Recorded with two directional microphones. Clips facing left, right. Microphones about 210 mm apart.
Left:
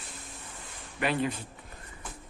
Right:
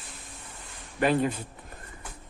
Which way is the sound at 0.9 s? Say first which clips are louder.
Right 5 dB; 40° right (ahead or behind).